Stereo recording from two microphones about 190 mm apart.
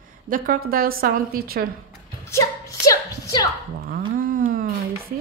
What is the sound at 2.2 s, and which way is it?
Music, 15° left (ahead or behind).